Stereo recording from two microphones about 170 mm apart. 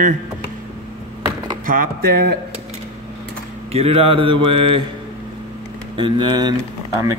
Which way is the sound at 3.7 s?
35° right (ahead or behind).